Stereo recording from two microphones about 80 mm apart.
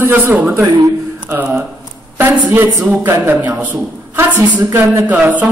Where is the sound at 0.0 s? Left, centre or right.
Right.